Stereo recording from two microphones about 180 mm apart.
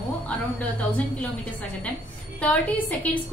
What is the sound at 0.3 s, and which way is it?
A woman's voice, 5° left (ahead or behind).